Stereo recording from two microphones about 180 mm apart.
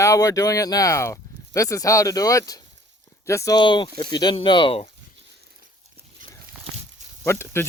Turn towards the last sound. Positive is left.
turn(degrees=15)  # may be behind; listen again after turning